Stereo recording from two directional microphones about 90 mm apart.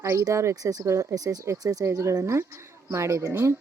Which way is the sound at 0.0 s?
35° right (ahead or behind).